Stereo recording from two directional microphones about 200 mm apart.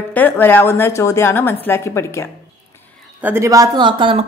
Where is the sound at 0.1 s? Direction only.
10° left (ahead or behind).